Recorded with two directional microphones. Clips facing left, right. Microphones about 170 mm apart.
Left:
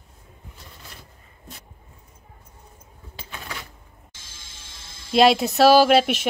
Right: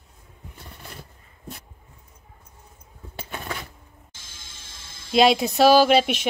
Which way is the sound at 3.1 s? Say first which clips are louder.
Right 5 dB; 50° right (ahead or behind).